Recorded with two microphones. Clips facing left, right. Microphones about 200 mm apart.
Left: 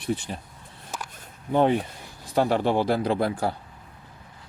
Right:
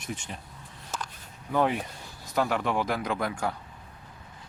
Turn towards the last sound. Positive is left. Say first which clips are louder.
# left 5 dB
turn(degrees=30)  # may be behind; listen again after turning